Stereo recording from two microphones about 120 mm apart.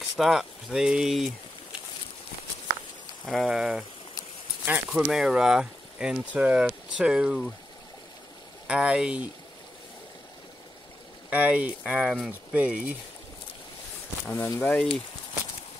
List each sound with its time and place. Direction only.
0.2 s speech: centre (ahead or behind)
3.3 s speech: centre (ahead or behind)
8.6 s speech: 10° right (ahead or behind)
11.2 s speech: 10° right (ahead or behind)
14.2 s speech: 20° left (ahead or behind)